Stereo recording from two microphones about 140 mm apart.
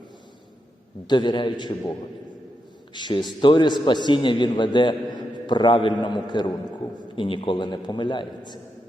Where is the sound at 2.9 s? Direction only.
35° left (ahead or behind).